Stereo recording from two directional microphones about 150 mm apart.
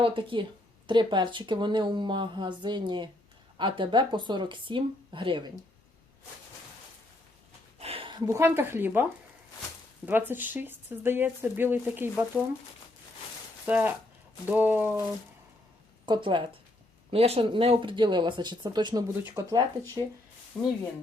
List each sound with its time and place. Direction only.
0.0 s speech: 35° right (ahead or behind)
7.8 s a sound: 40° right (ahead or behind)
8.3 s speech: 15° right (ahead or behind)
10.1 s speech: 15° right (ahead or behind)
13.7 s speech: 10° right (ahead or behind)
16.0 s speech: 30° right (ahead or behind)
20.5 s speech: 5° left (ahead or behind)